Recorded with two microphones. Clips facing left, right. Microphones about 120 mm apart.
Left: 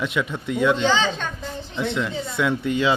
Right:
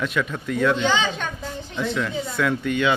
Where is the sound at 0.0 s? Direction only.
20° left (ahead or behind).